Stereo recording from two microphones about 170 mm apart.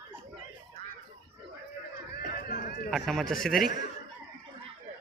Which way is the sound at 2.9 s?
Centre (ahead or behind).